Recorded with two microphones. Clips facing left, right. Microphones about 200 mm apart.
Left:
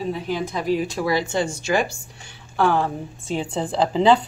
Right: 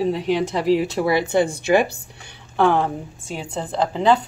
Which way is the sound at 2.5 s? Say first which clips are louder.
Right 2 dB; 20° right (ahead or behind).